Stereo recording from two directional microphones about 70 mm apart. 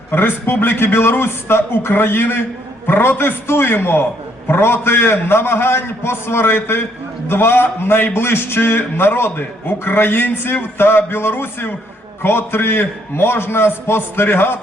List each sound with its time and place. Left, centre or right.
0.1 s a man's voice: left